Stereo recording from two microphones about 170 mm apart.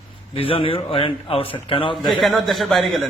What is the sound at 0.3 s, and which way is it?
A man's voice, 35° left (ahead or behind).